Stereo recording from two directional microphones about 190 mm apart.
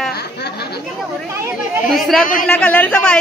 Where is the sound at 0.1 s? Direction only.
55° left (ahead or behind).